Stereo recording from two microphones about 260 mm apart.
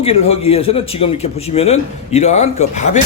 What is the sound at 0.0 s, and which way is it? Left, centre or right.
A man's voice, left.